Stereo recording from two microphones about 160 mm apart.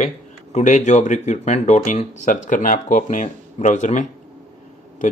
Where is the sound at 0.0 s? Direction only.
45° left (ahead or behind).